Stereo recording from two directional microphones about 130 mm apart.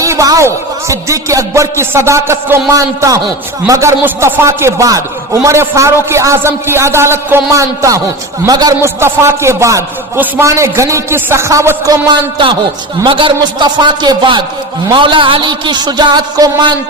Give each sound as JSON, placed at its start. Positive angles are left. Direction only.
{"t": 0.0, "sound": "a man's voice", "side_deg": -25}
{"t": 13.1, "sound": "a man's voice", "side_deg": -40}